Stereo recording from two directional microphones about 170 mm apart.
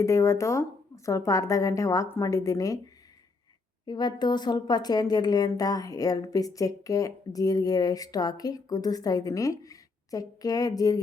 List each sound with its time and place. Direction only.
0.0 s speech: 20° left (ahead or behind)